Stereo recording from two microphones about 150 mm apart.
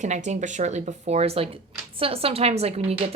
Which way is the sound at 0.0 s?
50° right (ahead or behind).